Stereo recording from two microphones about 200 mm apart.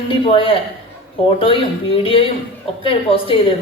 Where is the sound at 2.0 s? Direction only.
25° left (ahead or behind).